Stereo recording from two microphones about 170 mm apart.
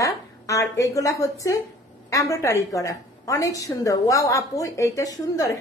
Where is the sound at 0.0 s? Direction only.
20° left (ahead or behind).